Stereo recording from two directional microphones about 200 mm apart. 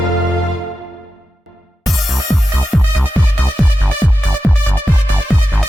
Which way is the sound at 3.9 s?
10° left (ahead or behind).